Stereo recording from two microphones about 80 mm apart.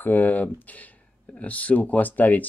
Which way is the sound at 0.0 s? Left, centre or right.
Left.